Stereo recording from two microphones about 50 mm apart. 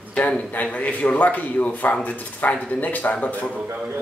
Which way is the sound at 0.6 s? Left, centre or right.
Left.